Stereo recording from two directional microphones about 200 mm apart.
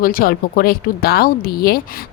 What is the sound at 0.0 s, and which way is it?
Speech, 45° left (ahead or behind).